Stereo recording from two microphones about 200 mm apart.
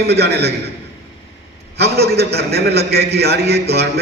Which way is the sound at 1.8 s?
55° right (ahead or behind).